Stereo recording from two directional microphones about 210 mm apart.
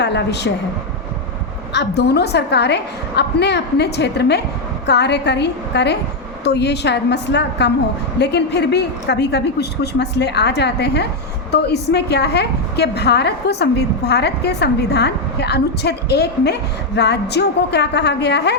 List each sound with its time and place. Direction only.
0.0 s a woman's voice: 55° left (ahead or behind)
1.7 s a woman's voice: 55° left (ahead or behind)